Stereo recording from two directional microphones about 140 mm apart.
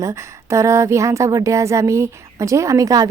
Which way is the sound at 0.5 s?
20° right (ahead or behind).